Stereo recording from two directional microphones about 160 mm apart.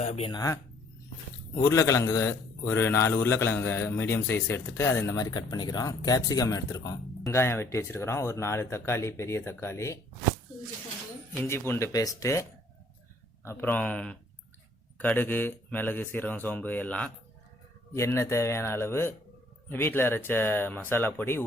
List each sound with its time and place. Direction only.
0.0 s speech: 45° left (ahead or behind)
0.3 s speech: 25° left (ahead or behind)
1.6 s a man's voice: 20° left (ahead or behind)
11.4 s a man's voice: 15° left (ahead or behind)